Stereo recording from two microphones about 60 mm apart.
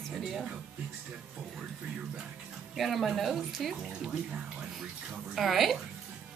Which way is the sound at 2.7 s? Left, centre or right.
Centre.